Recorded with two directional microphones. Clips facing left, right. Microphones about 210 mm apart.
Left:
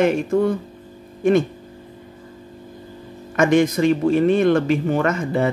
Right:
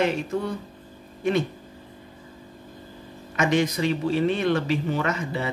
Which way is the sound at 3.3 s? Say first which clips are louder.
Left 7 dB; 50° left (ahead or behind).